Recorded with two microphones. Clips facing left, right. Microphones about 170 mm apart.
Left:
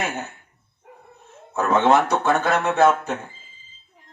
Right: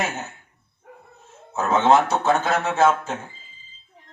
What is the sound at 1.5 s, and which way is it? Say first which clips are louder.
Music: even; 60° left (ahead or behind).